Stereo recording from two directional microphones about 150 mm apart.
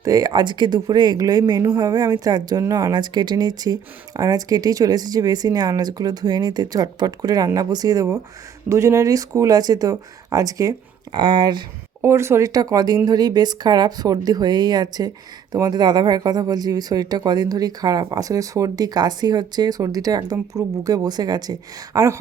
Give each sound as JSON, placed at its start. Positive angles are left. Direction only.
{"t": 0.0, "sound": "speech", "side_deg": -25}
{"t": 12.0, "sound": "speech", "side_deg": -20}